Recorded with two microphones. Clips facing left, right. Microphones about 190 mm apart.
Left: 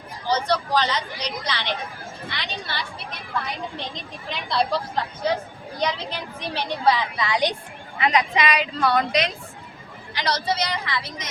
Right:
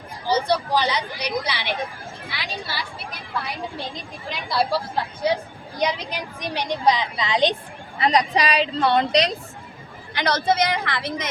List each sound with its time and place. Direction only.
0.3 s a woman's voice: 10° right (ahead or behind)
4.3 s a woman's voice: centre (ahead or behind); by 7.5 s 20° right (ahead or behind)
7.9 s a woman's voice: 35° right (ahead or behind)
10.2 s a woman's voice: 55° right (ahead or behind)